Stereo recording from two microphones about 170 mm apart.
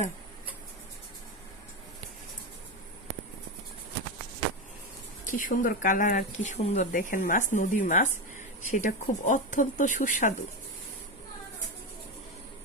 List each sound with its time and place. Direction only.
5.2 s speech: 50° left (ahead or behind)